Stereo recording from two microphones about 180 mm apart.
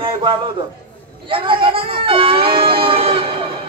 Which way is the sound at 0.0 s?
30° right (ahead or behind).